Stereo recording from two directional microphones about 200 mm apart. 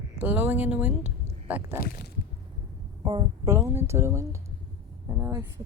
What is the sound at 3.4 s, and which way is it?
Speech, 15° right (ahead or behind).